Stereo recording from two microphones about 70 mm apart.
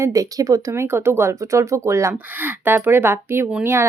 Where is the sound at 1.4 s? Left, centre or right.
Right.